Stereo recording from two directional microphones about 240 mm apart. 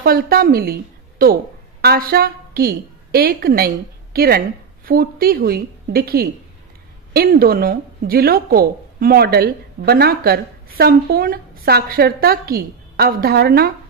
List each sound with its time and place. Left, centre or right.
0.0 s a woman's voice: right